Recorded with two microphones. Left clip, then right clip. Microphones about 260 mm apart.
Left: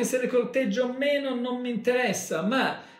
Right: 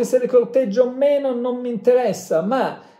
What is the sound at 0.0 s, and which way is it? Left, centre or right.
Speech, centre.